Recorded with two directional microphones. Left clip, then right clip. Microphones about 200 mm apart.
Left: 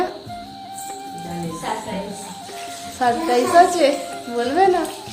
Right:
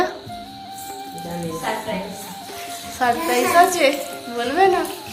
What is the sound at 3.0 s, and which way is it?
A woman's voice, 30° left (ahead or behind).